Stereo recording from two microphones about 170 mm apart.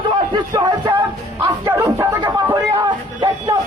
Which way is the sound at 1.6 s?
15° right (ahead or behind).